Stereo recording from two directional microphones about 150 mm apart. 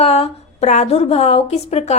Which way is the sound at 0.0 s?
45° left (ahead or behind).